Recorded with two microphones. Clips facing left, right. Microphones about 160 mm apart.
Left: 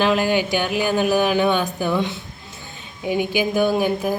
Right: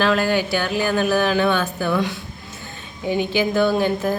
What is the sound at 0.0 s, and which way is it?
Speech, 15° left (ahead or behind).